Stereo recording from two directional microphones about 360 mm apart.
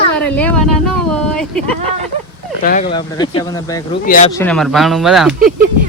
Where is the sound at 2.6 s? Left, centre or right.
Left.